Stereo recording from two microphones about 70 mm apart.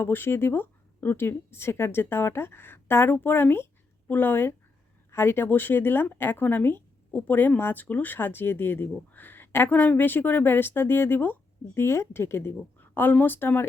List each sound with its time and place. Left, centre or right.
0.0 s speech: left